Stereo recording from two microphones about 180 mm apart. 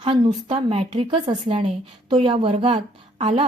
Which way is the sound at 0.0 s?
30° right (ahead or behind).